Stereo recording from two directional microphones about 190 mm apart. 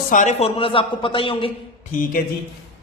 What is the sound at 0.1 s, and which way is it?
Speech, 40° left (ahead or behind).